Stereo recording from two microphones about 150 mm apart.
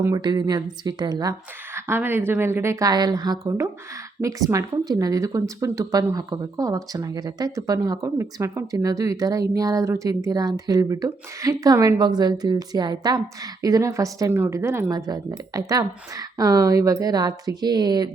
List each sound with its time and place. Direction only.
0.0 s speech: 25° right (ahead or behind)